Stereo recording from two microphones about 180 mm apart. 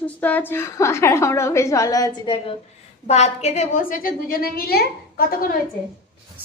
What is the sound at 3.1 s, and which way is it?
A woman's voice, 40° left (ahead or behind).